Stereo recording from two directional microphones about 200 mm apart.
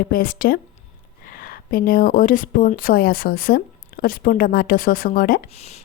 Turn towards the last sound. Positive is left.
turn(degrees=30)  # may be behind; listen again after turning